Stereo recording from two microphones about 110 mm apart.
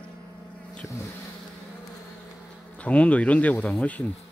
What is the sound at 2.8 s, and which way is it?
Speech, 10° left (ahead or behind).